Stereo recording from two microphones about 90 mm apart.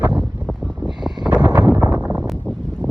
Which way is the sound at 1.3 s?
20° right (ahead or behind).